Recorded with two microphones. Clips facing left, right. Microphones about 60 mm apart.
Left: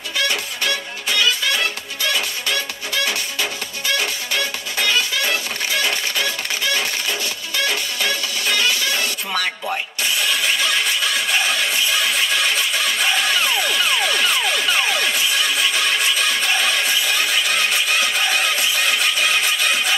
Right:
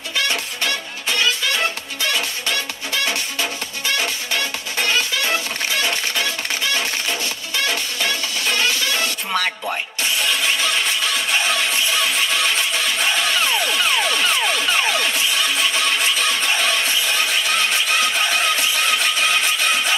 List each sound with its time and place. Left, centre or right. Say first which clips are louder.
0.3 s music: even; right
8.5 s music: even; right
13.7 s a sound: even; right
14.7 s music: even; right